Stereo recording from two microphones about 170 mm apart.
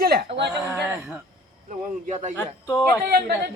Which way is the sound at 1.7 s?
45° right (ahead or behind).